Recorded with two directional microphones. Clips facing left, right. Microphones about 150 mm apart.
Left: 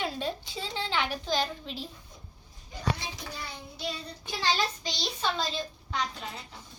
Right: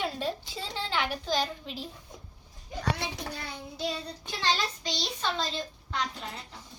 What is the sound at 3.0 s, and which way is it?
Child singing, 60° right (ahead or behind).